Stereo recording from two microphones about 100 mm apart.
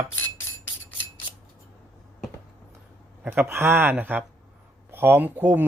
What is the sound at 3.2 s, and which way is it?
A man's voice, 20° right (ahead or behind).